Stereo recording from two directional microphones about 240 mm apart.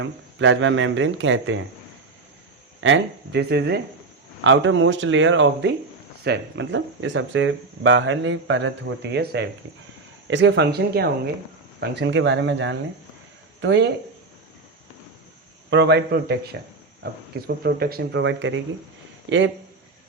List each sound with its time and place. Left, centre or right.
0.0 s speech: right
2.8 s speech: right
15.7 s speech: right